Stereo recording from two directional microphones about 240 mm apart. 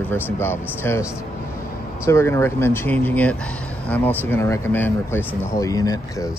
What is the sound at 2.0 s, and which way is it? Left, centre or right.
Speech, centre.